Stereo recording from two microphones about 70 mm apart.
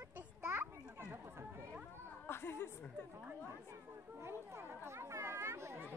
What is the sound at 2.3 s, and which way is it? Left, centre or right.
Speech, left.